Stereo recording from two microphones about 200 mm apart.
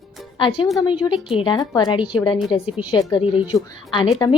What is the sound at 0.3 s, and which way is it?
A woman's voice, 25° left (ahead or behind).